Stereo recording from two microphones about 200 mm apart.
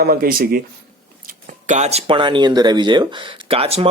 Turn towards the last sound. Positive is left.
turn(degrees=-30)  # may be behind; listen again after turning